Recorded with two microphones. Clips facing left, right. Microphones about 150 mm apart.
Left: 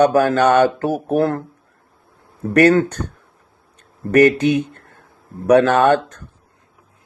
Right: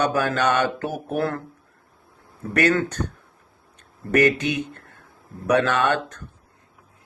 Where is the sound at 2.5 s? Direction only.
40° left (ahead or behind).